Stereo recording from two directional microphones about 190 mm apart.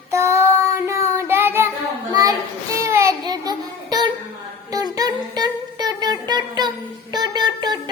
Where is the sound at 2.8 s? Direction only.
15° right (ahead or behind).